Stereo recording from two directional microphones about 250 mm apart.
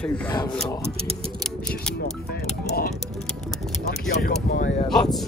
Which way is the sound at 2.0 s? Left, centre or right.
Left.